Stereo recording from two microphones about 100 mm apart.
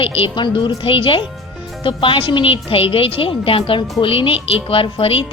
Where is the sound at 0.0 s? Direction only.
55° left (ahead or behind).